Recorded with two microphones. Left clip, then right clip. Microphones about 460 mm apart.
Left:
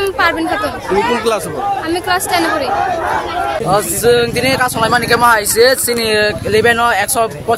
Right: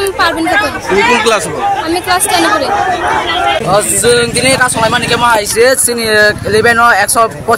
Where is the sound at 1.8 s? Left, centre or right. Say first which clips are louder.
Right 3 dB; left.